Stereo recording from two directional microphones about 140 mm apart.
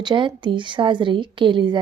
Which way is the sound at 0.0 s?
35° right (ahead or behind).